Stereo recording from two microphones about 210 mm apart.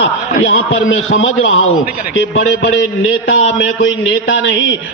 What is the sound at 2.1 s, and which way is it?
A man's voice, 65° left (ahead or behind).